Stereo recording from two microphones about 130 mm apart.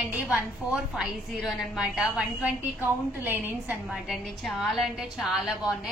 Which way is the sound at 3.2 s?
15° right (ahead or behind).